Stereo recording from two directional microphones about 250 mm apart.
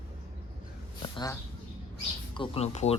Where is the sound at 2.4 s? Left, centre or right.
Left.